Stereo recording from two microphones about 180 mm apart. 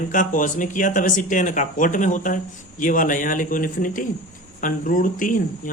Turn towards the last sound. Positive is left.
turn(degrees=50)  # may be behind; listen again after turning